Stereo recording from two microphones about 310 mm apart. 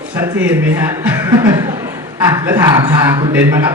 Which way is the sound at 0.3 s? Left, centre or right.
Centre.